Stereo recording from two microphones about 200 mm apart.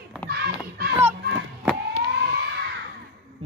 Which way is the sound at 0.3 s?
55° right (ahead or behind).